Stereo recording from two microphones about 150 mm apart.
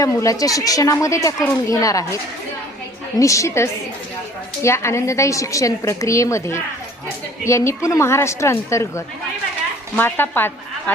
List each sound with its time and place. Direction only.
0.0 s speech: 20° left (ahead or behind)
3.2 s a woman's voice: 20° left (ahead or behind)